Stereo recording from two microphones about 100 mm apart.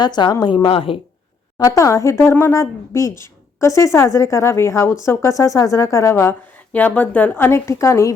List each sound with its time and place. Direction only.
0.0 s a woman's voice: 45° left (ahead or behind)
0.7 s a woman's voice: 65° left (ahead or behind)
1.5 s speech: 35° left (ahead or behind)